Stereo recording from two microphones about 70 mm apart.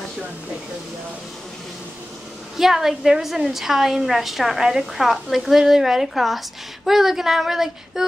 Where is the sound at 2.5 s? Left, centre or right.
Centre.